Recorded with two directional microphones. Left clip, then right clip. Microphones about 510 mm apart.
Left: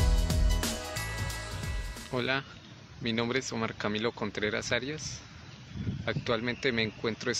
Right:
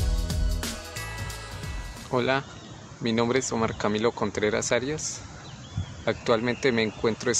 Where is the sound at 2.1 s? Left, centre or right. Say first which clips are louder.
Right 6 dB; right.